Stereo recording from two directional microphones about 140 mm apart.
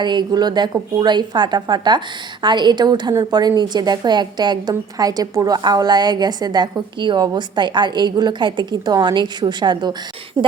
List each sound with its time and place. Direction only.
0.0 s a woman's voice: 30° right (ahead or behind)